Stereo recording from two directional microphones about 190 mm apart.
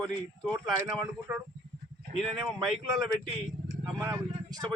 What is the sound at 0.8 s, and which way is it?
Speech, 15° right (ahead or behind).